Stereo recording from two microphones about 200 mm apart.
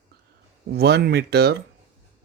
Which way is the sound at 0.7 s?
55° right (ahead or behind).